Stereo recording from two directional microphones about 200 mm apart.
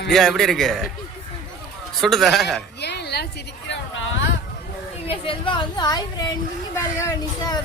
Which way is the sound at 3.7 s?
70° left (ahead or behind).